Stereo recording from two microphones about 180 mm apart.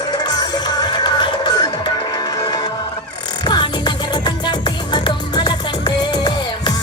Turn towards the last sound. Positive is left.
turn(degrees=25)  # may be behind; listen again after turning